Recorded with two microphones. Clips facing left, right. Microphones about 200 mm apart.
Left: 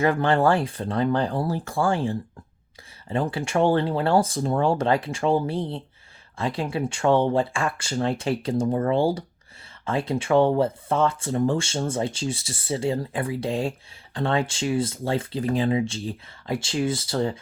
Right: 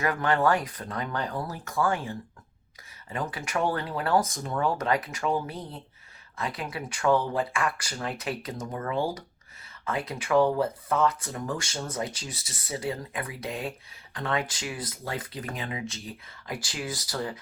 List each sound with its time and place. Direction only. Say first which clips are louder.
0.0 s speech: left 5 dB; 30° left (ahead or behind)